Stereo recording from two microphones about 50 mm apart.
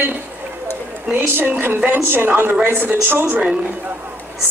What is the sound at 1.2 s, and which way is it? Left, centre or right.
A woman's voice, right.